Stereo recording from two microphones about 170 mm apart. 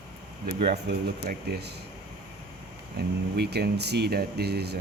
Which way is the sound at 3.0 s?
75° right (ahead or behind).